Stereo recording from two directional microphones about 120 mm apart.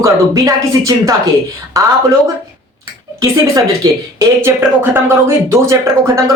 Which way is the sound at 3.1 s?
25° right (ahead or behind).